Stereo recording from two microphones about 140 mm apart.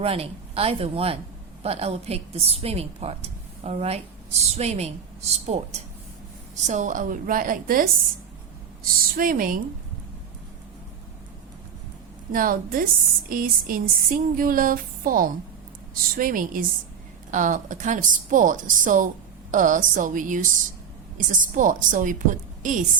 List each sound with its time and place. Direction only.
0.0 s a woman's voice: 45° right (ahead or behind); by 9.6 s 90° right
12.3 s a woman's voice: 85° right
17.3 s a woman's voice: 65° right (ahead or behind)
21.4 s a woman's voice: 70° right (ahead or behind)